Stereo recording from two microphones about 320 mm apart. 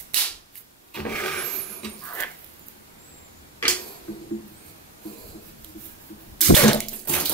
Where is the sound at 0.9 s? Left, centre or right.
Centre.